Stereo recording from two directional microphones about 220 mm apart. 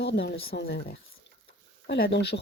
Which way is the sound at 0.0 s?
50° left (ahead or behind).